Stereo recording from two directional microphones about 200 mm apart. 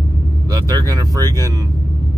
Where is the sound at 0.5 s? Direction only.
20° right (ahead or behind).